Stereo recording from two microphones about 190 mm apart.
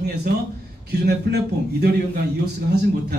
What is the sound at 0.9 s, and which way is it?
Speech, 60° right (ahead or behind).